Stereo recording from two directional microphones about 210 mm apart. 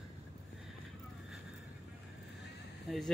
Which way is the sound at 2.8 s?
Centre (ahead or behind).